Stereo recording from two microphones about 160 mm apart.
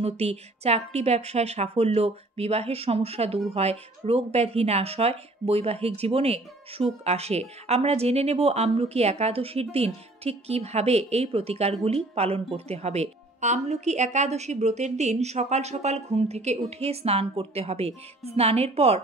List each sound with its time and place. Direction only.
0.0 s speech: 40° right (ahead or behind)